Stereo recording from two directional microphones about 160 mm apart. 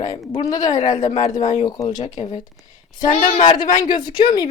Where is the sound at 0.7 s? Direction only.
45° left (ahead or behind).